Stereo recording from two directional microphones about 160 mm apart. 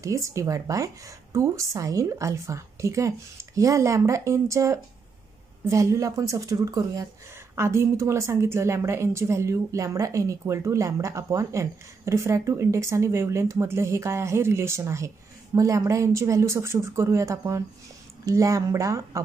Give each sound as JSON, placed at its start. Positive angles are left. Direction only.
{"t": 0.0, "sound": "a woman's voice", "side_deg": -20}